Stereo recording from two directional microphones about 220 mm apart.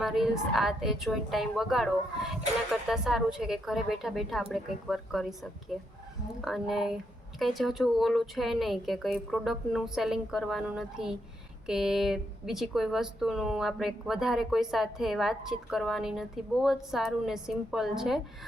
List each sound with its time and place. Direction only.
0.0 s speech: centre (ahead or behind)